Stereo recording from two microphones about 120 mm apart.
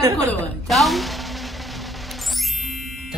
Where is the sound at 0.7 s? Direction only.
Centre (ahead or behind).